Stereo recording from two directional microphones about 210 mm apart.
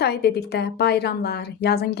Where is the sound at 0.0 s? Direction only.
50° left (ahead or behind).